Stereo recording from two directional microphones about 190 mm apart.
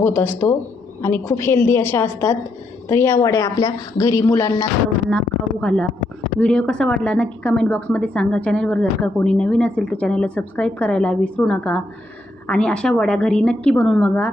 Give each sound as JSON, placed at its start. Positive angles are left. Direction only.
{"t": 0.0, "sound": "a woman's voice", "side_deg": 10}